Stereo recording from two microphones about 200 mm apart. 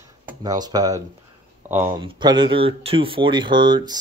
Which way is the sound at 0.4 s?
20° right (ahead or behind).